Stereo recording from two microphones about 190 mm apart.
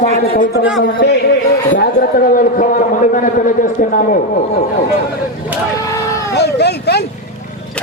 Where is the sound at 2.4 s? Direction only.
45° left (ahead or behind).